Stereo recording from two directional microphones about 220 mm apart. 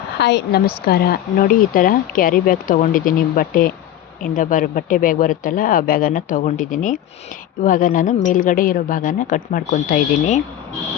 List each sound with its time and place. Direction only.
0.2 s speech: 50° left (ahead or behind)